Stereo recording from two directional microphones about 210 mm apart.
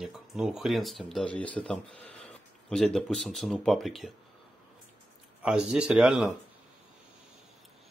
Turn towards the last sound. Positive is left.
turn(degrees=0)  # may be behind; listen again after turning